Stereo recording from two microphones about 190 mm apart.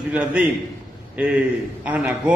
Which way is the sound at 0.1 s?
5° right (ahead or behind).